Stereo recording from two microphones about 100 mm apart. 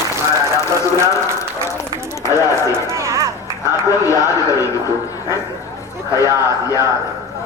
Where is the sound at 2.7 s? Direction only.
30° right (ahead or behind).